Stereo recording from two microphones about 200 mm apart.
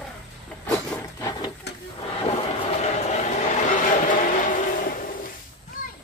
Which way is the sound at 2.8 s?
35° left (ahead or behind).